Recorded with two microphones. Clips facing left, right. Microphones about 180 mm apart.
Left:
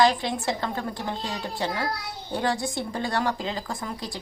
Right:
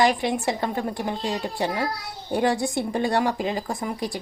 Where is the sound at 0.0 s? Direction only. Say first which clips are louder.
Right 1 dB; 15° right (ahead or behind).